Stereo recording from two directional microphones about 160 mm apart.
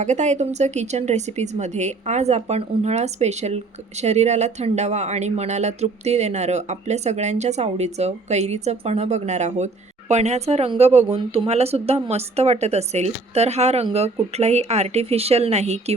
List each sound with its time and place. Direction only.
0.0 s speech: 45° right (ahead or behind)